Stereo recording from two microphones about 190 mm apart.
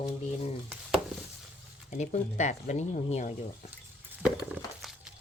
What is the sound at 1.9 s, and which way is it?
Speech, 40° left (ahead or behind).